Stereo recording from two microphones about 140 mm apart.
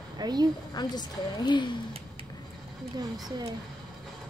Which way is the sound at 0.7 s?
30° left (ahead or behind).